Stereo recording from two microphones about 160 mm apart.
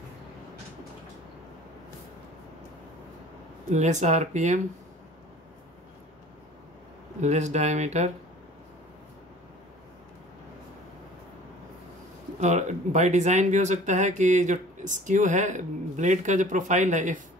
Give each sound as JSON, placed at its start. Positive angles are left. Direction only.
{"t": 3.7, "sound": "speech", "side_deg": -45}
{"t": 7.2, "sound": "speech", "side_deg": -45}
{"t": 12.4, "sound": "speech", "side_deg": -45}